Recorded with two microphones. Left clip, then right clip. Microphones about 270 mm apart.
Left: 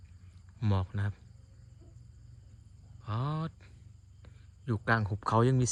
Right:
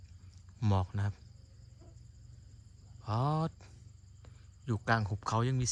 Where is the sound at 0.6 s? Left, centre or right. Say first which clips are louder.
Right 1 dB; centre.